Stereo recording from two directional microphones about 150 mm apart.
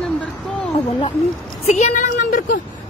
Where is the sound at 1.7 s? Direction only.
50° left (ahead or behind).